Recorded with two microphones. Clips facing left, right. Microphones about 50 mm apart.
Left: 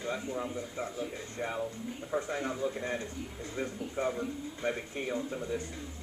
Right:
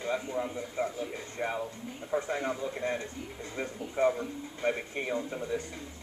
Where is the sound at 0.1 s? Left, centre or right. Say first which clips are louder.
Right 4 dB; centre.